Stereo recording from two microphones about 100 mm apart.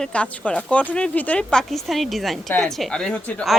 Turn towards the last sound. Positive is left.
turn(degrees=5)  # may be behind; listen again after turning